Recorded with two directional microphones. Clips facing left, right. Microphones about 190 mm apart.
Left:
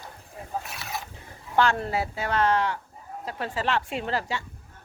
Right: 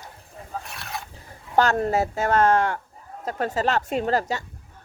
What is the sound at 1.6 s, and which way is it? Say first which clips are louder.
Speech: right 4 dB; 45° right (ahead or behind).